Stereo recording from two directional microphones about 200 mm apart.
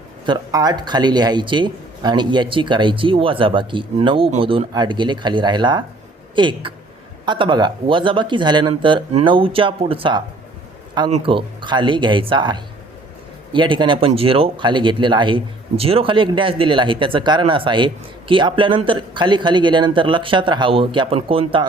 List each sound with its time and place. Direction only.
0.3 s speech: 20° right (ahead or behind)